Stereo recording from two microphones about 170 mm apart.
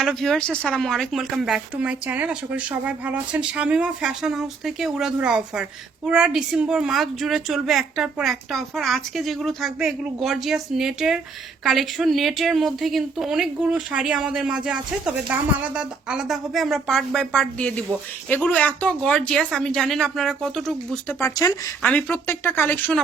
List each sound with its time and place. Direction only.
0.0 s speech: 5° left (ahead or behind)
21.2 s speech: 20° left (ahead or behind)
21.8 s speech: 10° left (ahead or behind)